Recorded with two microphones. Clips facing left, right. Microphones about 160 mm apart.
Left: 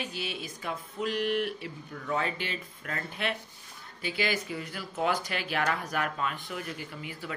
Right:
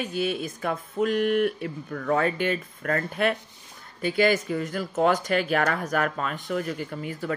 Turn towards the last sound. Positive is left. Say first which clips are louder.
# right 9 dB
turn(degrees=-45)  # may be behind; listen again after turning